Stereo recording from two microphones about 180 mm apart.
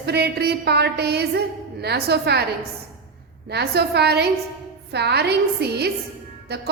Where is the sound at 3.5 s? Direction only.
65° right (ahead or behind).